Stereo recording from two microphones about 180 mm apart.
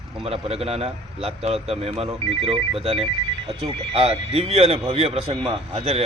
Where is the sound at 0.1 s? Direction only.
30° right (ahead or behind).